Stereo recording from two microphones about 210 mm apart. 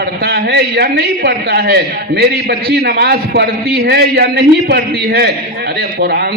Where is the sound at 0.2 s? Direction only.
50° right (ahead or behind).